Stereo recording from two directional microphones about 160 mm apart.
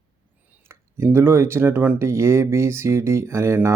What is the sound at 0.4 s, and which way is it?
Speech, 15° right (ahead or behind).